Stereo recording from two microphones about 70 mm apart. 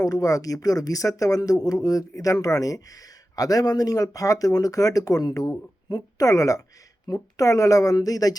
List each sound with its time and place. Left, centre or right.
0.0 s speech: left